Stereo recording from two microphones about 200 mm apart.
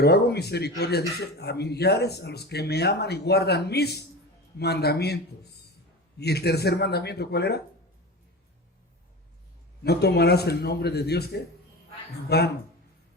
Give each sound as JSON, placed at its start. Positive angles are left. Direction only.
{"t": 0.0, "sound": "speech", "side_deg": 55}
{"t": 9.8, "sound": "speech", "side_deg": 55}